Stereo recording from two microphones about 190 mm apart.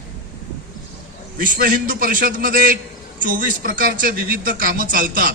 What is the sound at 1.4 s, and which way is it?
A man's voice, 45° right (ahead or behind).